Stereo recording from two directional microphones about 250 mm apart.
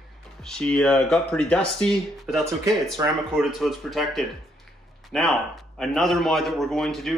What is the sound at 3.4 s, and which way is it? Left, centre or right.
A man's voice, centre.